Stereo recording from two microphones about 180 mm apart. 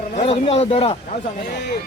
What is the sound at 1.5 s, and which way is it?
Speech, 70° left (ahead or behind).